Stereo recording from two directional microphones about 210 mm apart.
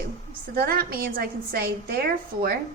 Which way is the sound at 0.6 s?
45° right (ahead or behind).